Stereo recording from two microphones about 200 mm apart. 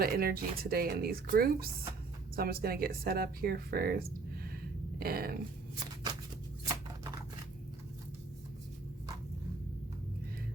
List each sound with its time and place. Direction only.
0.0 s speech: 50° right (ahead or behind)